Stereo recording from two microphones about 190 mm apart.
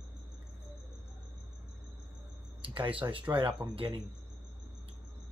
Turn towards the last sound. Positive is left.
turn(degrees=-25)  # may be behind; listen again after turning